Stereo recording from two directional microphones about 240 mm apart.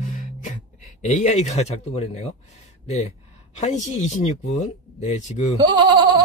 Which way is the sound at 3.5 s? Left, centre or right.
Left.